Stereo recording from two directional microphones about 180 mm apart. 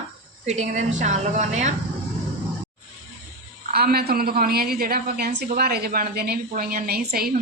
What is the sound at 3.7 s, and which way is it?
A woman's voice, 60° right (ahead or behind).